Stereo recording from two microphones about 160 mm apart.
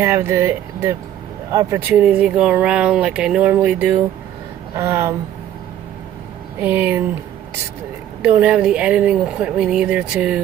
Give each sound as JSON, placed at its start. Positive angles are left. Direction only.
{"t": 0.0, "sound": "speech", "side_deg": -15}
{"t": 6.6, "sound": "speech", "side_deg": -15}
{"t": 8.2, "sound": "speech", "side_deg": -10}